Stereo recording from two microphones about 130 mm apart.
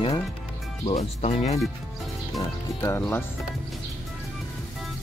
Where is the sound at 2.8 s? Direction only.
20° left (ahead or behind).